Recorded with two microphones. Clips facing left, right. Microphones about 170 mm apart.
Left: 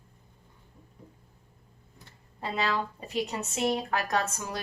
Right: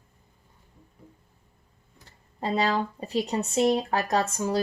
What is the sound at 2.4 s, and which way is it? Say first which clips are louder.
Speech: right 5 dB; 35° right (ahead or behind).